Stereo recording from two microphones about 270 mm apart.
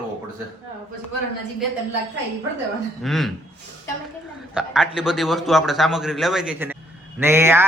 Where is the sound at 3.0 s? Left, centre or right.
Centre.